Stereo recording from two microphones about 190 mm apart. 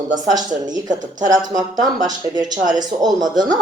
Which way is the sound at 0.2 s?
20° right (ahead or behind).